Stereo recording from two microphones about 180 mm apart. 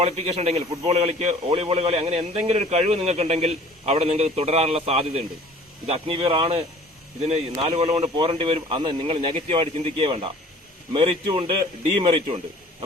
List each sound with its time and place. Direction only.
0.0 s a man's voice: 35° right (ahead or behind)